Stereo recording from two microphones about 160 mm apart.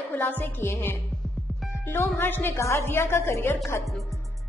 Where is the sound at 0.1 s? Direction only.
10° left (ahead or behind).